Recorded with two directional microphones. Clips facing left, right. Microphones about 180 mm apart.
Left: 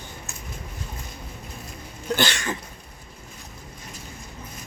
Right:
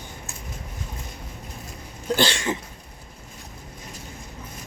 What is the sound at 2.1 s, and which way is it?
Hiccup, 30° right (ahead or behind).